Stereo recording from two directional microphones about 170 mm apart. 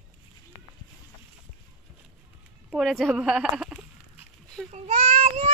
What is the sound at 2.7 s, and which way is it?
Speech, centre (ahead or behind).